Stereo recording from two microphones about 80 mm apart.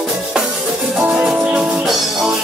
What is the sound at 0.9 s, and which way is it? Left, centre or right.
Music, centre.